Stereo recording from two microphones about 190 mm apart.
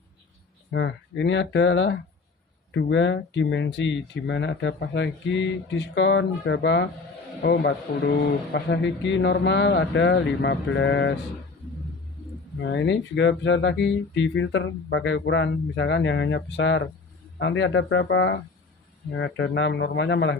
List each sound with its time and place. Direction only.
0.7 s speech: 70° left (ahead or behind)
7.4 s speech: 55° left (ahead or behind)
12.5 s speech: 70° left (ahead or behind)